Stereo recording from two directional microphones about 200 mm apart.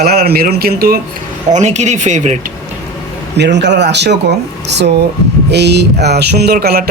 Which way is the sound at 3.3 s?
60° right (ahead or behind).